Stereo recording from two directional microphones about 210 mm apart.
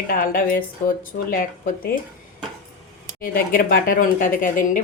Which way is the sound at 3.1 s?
45° left (ahead or behind).